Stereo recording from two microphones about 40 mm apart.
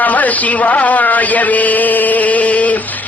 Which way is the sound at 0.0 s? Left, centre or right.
Left.